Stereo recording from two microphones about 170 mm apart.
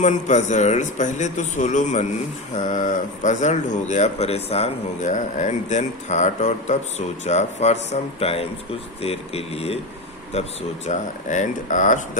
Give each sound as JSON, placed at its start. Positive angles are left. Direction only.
{"t": 0.0, "sound": "speech", "side_deg": 45}